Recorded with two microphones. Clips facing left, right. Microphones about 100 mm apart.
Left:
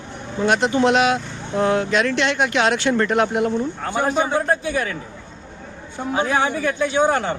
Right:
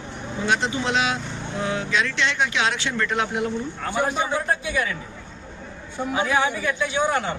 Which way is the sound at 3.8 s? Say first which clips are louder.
Left 2 dB; 30° left (ahead or behind).